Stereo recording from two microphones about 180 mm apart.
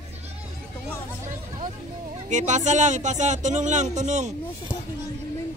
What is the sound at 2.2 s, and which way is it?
Speech, 40° right (ahead or behind).